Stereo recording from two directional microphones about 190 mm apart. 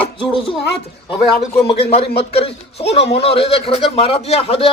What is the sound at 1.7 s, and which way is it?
A man's voice, 30° left (ahead or behind).